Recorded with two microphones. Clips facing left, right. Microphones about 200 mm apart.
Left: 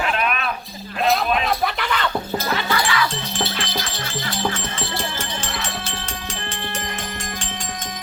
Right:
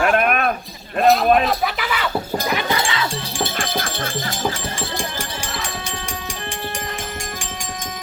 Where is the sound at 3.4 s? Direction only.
50° right (ahead or behind).